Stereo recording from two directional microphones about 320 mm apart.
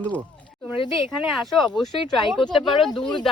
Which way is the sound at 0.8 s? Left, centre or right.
Centre.